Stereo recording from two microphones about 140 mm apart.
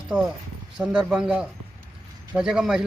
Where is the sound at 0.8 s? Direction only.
10° right (ahead or behind).